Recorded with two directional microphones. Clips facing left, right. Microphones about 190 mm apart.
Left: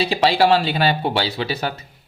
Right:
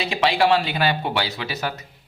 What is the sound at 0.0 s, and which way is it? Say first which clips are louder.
A man's voice: left 3 dB; 35° left (ahead or behind).